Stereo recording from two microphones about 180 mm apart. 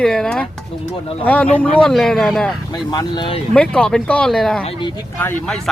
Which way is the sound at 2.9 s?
25° left (ahead or behind).